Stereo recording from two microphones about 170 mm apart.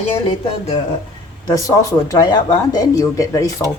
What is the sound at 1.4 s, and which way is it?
Speech, 20° left (ahead or behind).